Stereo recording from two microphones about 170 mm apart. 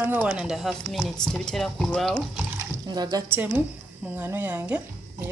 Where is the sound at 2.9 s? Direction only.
25° right (ahead or behind).